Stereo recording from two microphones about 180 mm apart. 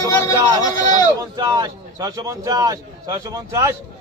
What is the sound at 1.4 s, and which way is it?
A man's voice, 20° right (ahead or behind).